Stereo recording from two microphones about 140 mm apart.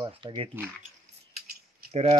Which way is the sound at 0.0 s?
35° right (ahead or behind).